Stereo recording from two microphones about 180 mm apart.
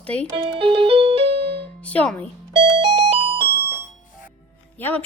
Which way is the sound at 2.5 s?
30° right (ahead or behind).